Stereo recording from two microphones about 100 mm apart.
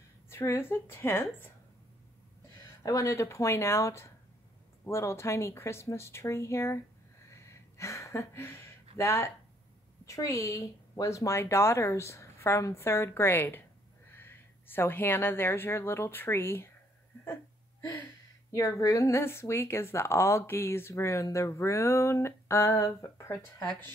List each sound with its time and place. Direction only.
0.3 s speech: 25° left (ahead or behind)
2.8 s speech: 35° left (ahead or behind)
7.2 s a sound: 30° left (ahead or behind)
8.9 s a woman's voice: 30° left (ahead or behind)
18.5 s speech: 35° left (ahead or behind)